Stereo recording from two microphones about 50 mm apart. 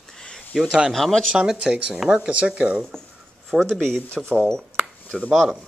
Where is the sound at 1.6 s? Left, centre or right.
Right.